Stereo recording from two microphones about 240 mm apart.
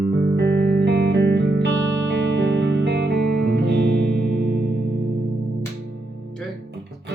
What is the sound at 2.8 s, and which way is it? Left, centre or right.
Music, right.